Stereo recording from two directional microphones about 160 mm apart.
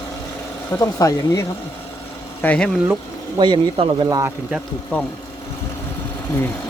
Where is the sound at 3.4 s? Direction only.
30° right (ahead or behind).